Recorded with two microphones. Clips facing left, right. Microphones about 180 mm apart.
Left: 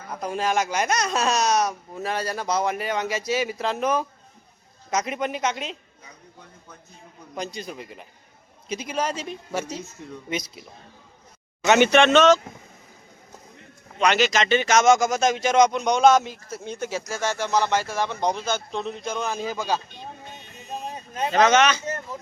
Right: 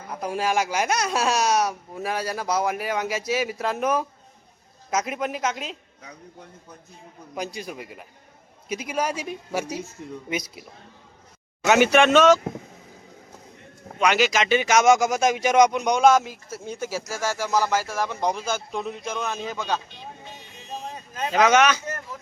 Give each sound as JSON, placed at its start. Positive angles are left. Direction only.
{"t": 0.1, "sound": "a woman's voice", "side_deg": -10}
{"t": 7.3, "sound": "speech", "side_deg": -10}
{"t": 11.6, "sound": "speech", "side_deg": -5}
{"t": 14.0, "sound": "speech", "side_deg": -5}
{"t": 21.2, "sound": "speech", "side_deg": -5}
{"t": 21.8, "sound": "speech", "side_deg": 20}